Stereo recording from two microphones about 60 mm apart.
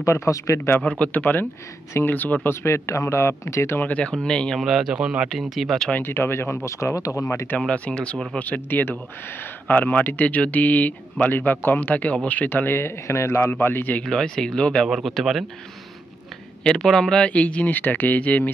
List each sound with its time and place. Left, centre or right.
0.0 s speech: left
0.8 s speech: left
2.5 s speech: left
3.8 s speech: left
4.2 s speech: centre
4.6 s speech: centre
5.3 s speech: centre
6.0 s speech: left
6.6 s speech: left
7.6 s speech: centre; by 13.5 s left
13.6 s speech: left
14.0 s speech: centre
15.0 s speech: centre
16.6 s speech: centre